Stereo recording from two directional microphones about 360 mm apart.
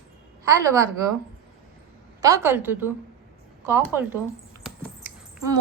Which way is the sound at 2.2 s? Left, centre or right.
Centre.